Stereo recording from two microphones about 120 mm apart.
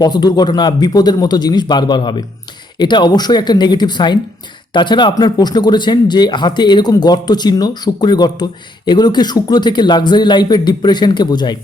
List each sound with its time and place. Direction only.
0.0 s speech: 35° left (ahead or behind)